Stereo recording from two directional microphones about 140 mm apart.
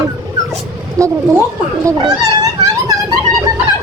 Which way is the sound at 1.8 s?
30° right (ahead or behind).